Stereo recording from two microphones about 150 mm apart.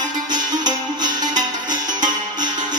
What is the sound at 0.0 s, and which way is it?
Music, 30° right (ahead or behind).